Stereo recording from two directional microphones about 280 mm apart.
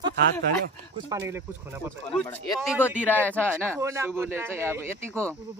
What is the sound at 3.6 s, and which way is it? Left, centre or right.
Speech, centre.